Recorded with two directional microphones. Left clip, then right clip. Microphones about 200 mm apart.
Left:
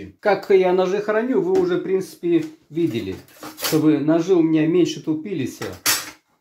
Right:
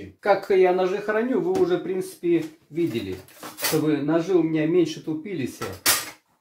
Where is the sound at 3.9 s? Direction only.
35° left (ahead or behind).